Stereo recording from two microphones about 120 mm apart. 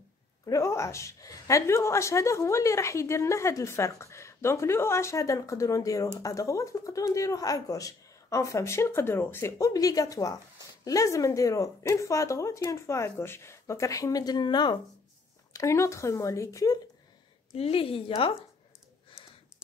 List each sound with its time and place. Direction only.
0.5 s a woman's voice: 25° left (ahead or behind)
15.5 s a woman's voice: 25° left (ahead or behind)
17.6 s a woman's voice: 50° left (ahead or behind)